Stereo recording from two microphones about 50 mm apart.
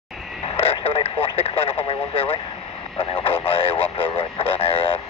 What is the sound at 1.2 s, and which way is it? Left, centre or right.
Radio, left.